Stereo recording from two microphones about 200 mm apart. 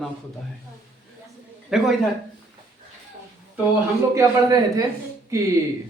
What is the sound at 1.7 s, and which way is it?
Speech, 5° right (ahead or behind).